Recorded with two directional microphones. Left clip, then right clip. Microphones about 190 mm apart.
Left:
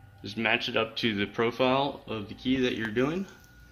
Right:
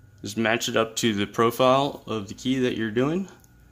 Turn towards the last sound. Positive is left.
turn(degrees=-65)  # may be behind; listen again after turning